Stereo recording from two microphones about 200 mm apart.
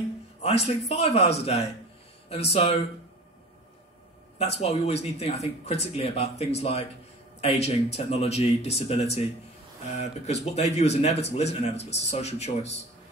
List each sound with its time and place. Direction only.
0.8 s speech: 30° left (ahead or behind)
4.4 s speech: 30° left (ahead or behind)